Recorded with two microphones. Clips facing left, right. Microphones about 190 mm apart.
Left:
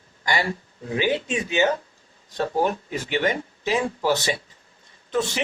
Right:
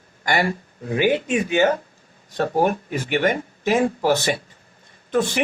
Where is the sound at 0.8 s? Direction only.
55° right (ahead or behind).